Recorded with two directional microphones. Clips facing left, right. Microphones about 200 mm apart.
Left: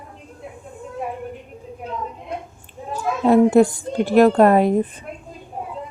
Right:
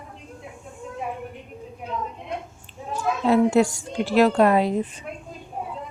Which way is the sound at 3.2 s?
55° left (ahead or behind).